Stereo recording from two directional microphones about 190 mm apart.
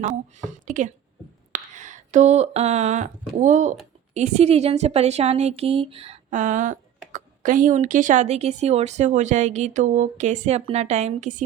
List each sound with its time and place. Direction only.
0.0 s a woman's voice: 40° right (ahead or behind)